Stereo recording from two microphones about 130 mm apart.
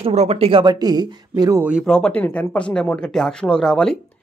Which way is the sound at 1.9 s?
5° left (ahead or behind).